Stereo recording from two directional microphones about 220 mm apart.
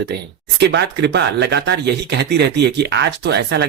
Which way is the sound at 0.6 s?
50° right (ahead or behind).